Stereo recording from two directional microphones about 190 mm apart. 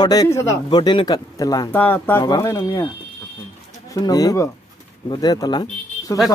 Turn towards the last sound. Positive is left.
turn(degrees=20)  # may be behind; listen again after turning